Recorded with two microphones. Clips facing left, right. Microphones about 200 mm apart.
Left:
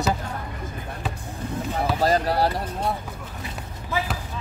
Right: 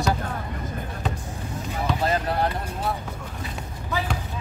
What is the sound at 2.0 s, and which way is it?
Speech, 35° left (ahead or behind).